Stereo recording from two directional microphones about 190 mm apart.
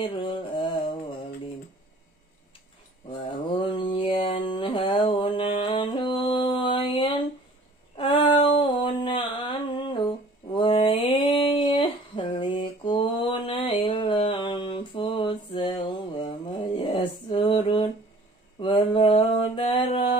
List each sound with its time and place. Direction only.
0.1 s mantra: 25° left (ahead or behind)
3.1 s mantra: 25° left (ahead or behind)
7.9 s a sound: 25° left (ahead or behind)
18.6 s mantra: 25° left (ahead or behind)